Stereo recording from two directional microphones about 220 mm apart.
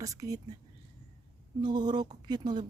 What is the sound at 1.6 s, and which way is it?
Speech, 20° right (ahead or behind).